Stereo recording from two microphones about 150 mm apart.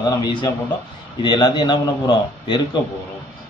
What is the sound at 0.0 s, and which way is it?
A man's voice, 30° left (ahead or behind).